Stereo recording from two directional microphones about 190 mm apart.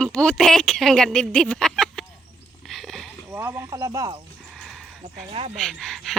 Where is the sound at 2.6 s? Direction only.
Centre (ahead or behind).